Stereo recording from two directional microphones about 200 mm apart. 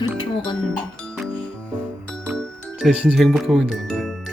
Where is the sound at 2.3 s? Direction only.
Centre (ahead or behind).